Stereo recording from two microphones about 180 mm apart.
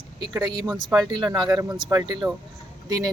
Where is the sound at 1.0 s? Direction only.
25° right (ahead or behind).